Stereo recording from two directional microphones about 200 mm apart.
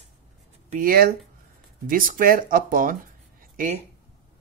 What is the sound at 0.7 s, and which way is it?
Speech, 45° right (ahead or behind).